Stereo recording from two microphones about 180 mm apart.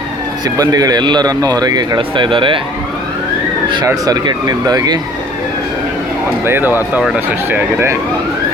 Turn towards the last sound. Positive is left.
turn(degrees=-10)  # may be behind; listen again after turning